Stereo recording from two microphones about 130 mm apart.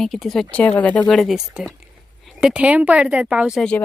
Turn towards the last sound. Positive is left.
turn(degrees=-5)  # may be behind; listen again after turning